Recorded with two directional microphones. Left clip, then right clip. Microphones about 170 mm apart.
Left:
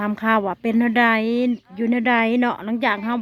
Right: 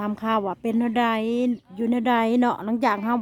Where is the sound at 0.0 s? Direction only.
10° right (ahead or behind).